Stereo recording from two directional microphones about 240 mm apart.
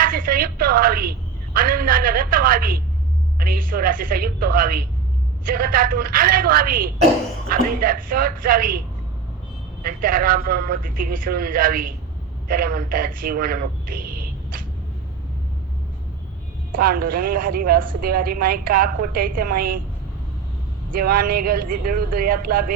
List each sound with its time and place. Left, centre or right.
0.0 s a woman's voice: right
9.8 s a woman's voice: right
16.7 s a woman's voice: right
20.9 s a woman's voice: right